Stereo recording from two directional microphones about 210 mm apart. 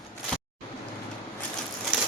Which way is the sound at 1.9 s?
5° right (ahead or behind).